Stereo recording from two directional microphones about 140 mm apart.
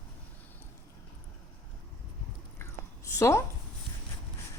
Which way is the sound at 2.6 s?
20° left (ahead or behind).